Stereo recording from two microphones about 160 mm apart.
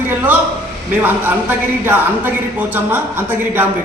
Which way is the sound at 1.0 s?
10° right (ahead or behind).